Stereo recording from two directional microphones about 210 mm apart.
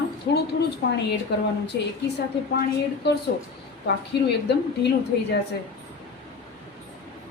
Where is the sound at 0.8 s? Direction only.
50° left (ahead or behind).